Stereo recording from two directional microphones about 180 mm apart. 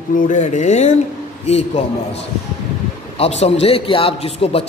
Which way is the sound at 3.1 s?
35° left (ahead or behind).